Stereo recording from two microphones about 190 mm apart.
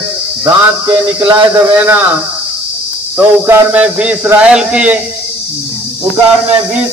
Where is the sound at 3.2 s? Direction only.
10° right (ahead or behind).